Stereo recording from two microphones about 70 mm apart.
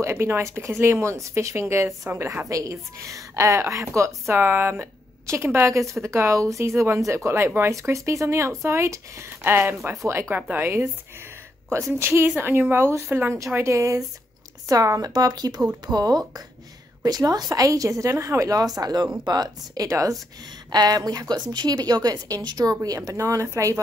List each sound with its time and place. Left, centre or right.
0.0 s a woman's voice: right
4.4 s a woman's voice: right
9.4 s a woman's voice: right
14.7 s a woman's voice: right
15.1 s a woman's voice: right
19.9 s speech: right
20.7 s a woman's voice: right
22.7 s speech: right